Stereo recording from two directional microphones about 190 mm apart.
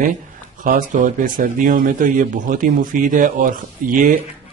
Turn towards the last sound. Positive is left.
turn(degrees=-45)  # may be behind; listen again after turning